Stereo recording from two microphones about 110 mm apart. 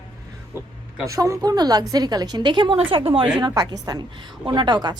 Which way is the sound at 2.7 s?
60° right (ahead or behind).